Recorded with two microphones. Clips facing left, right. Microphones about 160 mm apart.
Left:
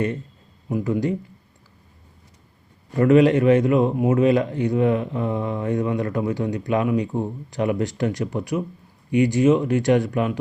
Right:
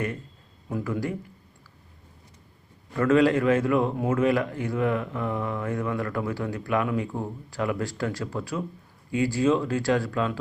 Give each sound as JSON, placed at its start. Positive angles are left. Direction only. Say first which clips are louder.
{"t": 0.7, "sound": "a man's voice", "louder": "left 6 dB", "side_deg": 20}
{"t": 2.9, "sound": "a man's voice", "louder": "left 5 dB", "side_deg": 20}